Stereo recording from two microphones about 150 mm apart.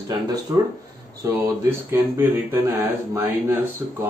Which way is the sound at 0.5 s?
25° right (ahead or behind).